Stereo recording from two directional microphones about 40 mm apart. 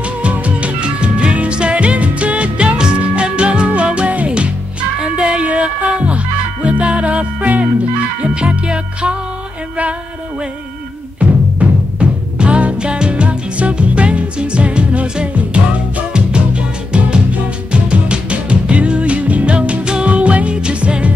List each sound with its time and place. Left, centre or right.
0.0 s music: right
11.2 s music: right